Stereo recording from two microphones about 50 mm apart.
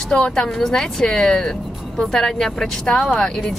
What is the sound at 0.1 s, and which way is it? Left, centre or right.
Speech, centre.